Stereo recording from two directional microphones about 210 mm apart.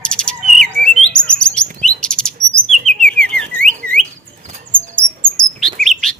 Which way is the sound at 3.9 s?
45° right (ahead or behind).